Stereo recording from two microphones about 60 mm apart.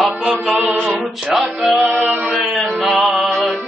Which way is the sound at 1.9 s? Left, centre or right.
Right.